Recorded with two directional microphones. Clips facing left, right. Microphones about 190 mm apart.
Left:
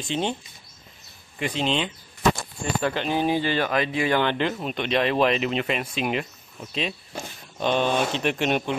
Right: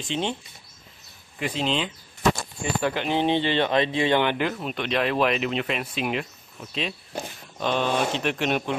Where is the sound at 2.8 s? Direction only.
15° right (ahead or behind).